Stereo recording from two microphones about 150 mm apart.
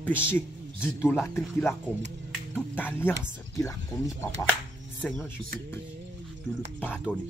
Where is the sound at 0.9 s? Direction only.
15° left (ahead or behind).